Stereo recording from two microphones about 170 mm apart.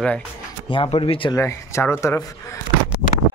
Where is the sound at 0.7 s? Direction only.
35° left (ahead or behind).